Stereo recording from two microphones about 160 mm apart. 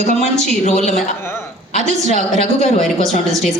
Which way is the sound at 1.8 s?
45° left (ahead or behind).